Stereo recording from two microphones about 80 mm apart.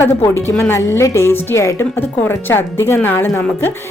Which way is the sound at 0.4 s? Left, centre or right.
Left.